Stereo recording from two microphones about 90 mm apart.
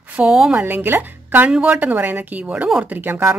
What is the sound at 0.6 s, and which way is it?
A woman's voice, 20° right (ahead or behind).